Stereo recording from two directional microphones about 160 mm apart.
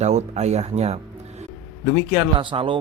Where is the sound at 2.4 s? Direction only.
30° right (ahead or behind).